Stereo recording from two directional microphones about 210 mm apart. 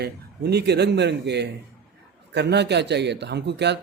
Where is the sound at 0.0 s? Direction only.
50° right (ahead or behind).